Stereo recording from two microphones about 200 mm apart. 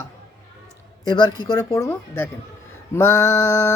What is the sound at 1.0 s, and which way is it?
Speech, 20° left (ahead or behind).